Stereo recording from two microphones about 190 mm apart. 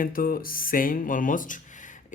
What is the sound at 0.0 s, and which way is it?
A man's voice, 50° left (ahead or behind).